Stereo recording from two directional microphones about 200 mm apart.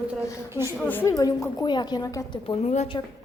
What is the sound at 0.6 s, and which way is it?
A woman's voice, 15° left (ahead or behind).